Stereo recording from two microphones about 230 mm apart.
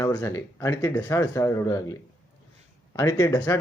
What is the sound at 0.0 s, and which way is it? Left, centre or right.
A man's voice, centre.